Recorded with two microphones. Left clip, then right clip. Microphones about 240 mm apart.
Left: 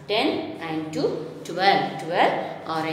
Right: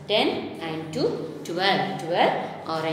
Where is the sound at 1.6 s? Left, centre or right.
Centre.